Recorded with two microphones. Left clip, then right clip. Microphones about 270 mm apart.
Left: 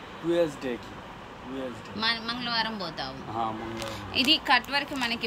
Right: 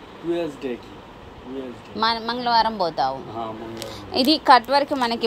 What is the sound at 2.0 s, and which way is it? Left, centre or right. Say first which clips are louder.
A woman's voice: right 7 dB; centre.